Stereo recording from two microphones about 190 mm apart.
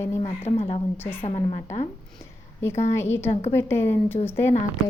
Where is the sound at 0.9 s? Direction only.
10° left (ahead or behind).